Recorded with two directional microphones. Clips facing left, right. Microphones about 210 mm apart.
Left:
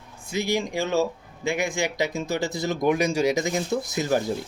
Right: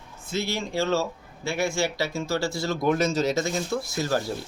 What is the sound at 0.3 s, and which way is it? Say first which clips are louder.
Speech: left 3 dB; 15° left (ahead or behind).